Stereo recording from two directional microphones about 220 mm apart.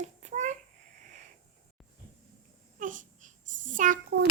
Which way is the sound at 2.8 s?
35° right (ahead or behind).